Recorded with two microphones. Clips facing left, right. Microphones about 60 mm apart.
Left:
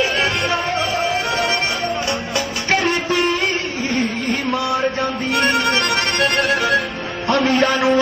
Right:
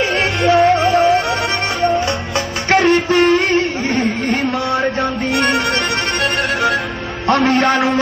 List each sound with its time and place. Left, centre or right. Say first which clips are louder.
0.0 s music: right 3 dB; right
7.3 s a man's voice: right 3 dB; right